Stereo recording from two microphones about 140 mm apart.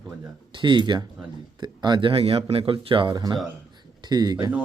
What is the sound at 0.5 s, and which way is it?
Speech, 35° right (ahead or behind).